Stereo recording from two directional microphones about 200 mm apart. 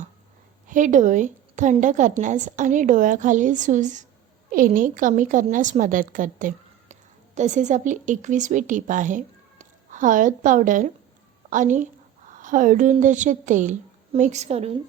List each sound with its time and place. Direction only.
0.7 s a woman's voice: 40° right (ahead or behind)